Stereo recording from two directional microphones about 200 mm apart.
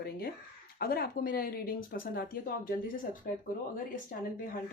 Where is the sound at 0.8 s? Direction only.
50° left (ahead or behind).